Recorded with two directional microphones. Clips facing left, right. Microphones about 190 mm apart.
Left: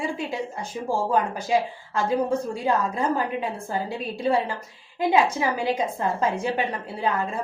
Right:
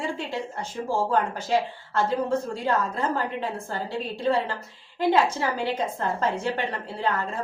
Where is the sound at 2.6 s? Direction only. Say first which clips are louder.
Left 3 dB; 10° left (ahead or behind).